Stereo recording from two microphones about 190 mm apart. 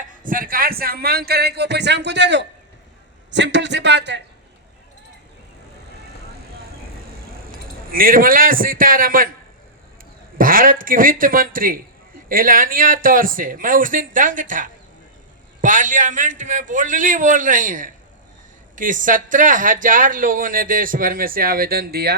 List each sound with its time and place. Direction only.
0.0 s a man's voice: 45° right (ahead or behind); by 4.2 s 65° right (ahead or behind)
7.9 s speech: 50° right (ahead or behind)
10.3 s speech: 45° right (ahead or behind)